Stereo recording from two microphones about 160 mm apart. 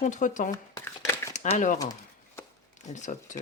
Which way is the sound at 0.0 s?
50° left (ahead or behind).